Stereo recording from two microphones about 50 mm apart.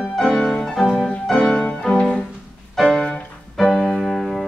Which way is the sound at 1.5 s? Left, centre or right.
Centre.